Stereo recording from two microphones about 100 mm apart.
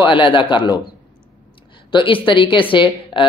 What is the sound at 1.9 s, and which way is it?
Speech, 55° left (ahead or behind).